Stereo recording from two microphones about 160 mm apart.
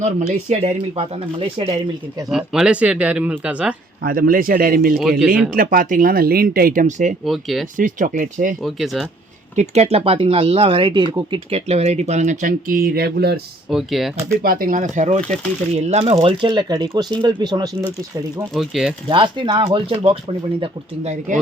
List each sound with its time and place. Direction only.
0.0 s speech: 50° right (ahead or behind)
2.3 s speech: 5° right (ahead or behind)
4.0 s speech: 65° right (ahead or behind)
7.3 s speech: centre (ahead or behind)
7.8 s speech: 55° right (ahead or behind)
8.6 s speech: centre (ahead or behind)
9.6 s speech: 40° right (ahead or behind); by 13.4 s 85° right
13.7 s speech: centre (ahead or behind)
14.4 s speech: 60° right (ahead or behind); by 17.8 s 25° right (ahead or behind)
18.5 s speech: centre (ahead or behind)
19.0 s speech: 30° right (ahead or behind)
20.6 s speech: 45° right (ahead or behind)